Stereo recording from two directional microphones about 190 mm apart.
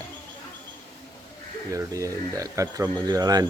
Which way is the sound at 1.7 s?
15° right (ahead or behind).